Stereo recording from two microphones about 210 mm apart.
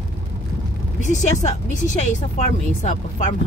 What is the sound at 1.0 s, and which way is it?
Speech, 35° left (ahead or behind).